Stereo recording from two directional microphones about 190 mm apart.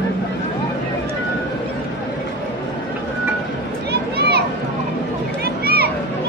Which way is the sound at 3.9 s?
60° right (ahead or behind).